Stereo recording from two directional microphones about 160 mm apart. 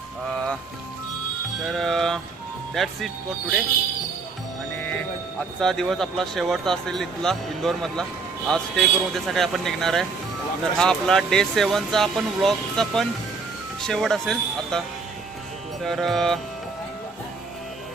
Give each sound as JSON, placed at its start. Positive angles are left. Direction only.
{"t": 1.6, "sound": "music", "side_deg": 0}
{"t": 2.7, "sound": "speech", "side_deg": 0}
{"t": 5.5, "sound": "speech", "side_deg": 5}
{"t": 15.8, "sound": "speech", "side_deg": 0}